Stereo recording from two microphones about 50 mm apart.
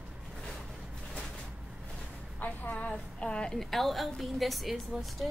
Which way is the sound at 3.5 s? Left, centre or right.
Centre.